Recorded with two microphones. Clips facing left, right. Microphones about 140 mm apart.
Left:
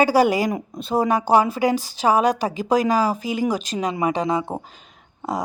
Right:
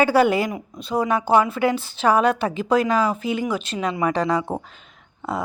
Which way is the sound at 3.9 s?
20° left (ahead or behind).